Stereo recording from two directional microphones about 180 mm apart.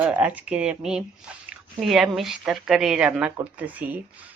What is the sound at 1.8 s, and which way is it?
A woman's voice, centre (ahead or behind).